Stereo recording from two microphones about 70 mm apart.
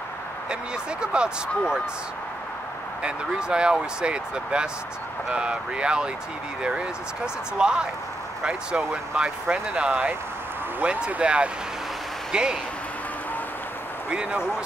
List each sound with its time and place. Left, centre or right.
1.0 s speech: centre
3.0 s speech: centre
7.5 s speech: centre
9.5 s speech: centre
14.1 s speech: centre